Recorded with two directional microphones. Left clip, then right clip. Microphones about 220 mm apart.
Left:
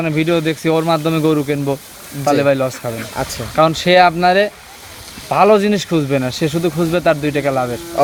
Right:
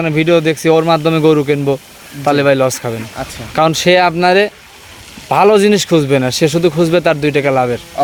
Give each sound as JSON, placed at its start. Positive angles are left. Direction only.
{"t": 0.0, "sound": "speech", "side_deg": -45}
{"t": 3.2, "sound": "speech", "side_deg": 35}
{"t": 3.5, "sound": "speech", "side_deg": -50}
{"t": 8.0, "sound": "speech", "side_deg": 35}